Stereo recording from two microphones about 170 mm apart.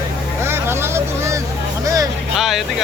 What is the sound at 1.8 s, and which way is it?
Music, 20° right (ahead or behind).